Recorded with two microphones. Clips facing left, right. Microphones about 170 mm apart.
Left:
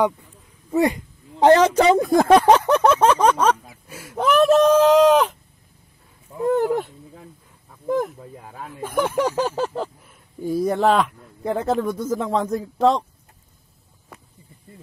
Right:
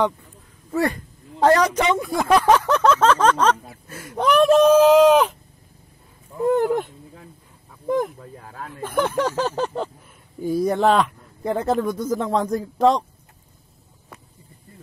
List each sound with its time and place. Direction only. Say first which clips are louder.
0.7 s a sound: left 3 dB; 15° left (ahead or behind)
1.8 s speech: left 6 dB; 40° left (ahead or behind)
2.4 s speech: left 2 dB; 20° left (ahead or behind); by 5.3 s centre (ahead or behind)
6.3 s speech: right 1 dB; centre (ahead or behind)